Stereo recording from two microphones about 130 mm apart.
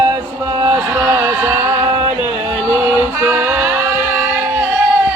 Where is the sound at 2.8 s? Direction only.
20° right (ahead or behind).